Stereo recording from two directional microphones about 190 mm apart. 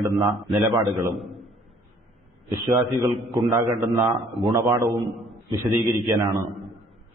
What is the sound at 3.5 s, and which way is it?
A man's voice, 15° right (ahead or behind).